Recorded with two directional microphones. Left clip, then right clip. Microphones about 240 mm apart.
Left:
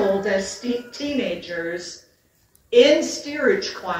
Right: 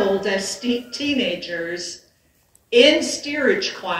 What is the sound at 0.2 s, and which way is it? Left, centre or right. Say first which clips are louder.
Speech: even; right.